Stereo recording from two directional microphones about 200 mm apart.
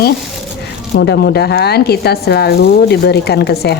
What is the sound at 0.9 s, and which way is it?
Speech, 55° left (ahead or behind).